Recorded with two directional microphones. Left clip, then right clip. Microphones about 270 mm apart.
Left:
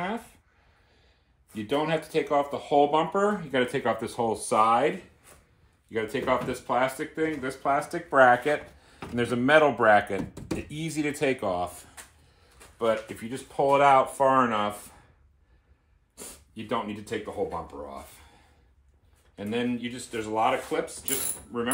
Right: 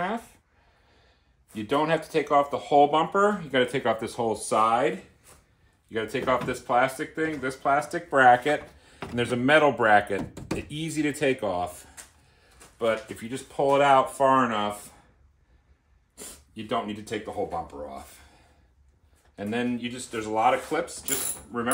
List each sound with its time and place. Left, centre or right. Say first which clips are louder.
0.0 s a sound: right 3 dB; centre
1.5 s speech: right 2 dB; centre
12.6 s a sound: even; centre
13.1 s speech: right 1 dB; centre
13.7 s speech: even; centre
14.2 s speech: right 1 dB; centre
16.7 s speech: right 1 dB; centre